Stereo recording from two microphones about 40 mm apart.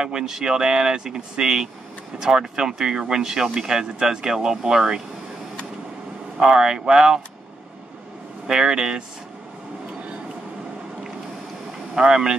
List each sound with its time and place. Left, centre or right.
0.0 s speech: centre
6.4 s speech: centre
8.5 s speech: centre
11.9 s speech: right